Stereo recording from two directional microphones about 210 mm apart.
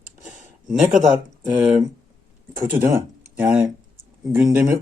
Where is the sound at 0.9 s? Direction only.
5° right (ahead or behind).